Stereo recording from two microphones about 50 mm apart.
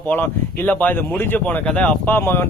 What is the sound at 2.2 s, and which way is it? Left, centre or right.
Speech, left.